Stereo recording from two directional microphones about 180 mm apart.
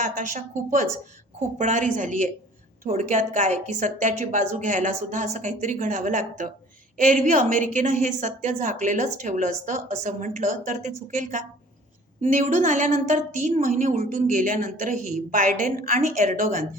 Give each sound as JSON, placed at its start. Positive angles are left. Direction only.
{"t": 0.0, "sound": "a woman's voice", "side_deg": -45}